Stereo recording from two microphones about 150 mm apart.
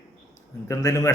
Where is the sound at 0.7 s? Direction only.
20° left (ahead or behind).